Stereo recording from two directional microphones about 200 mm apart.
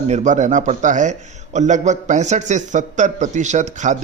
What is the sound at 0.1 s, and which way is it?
Speech, 35° right (ahead or behind).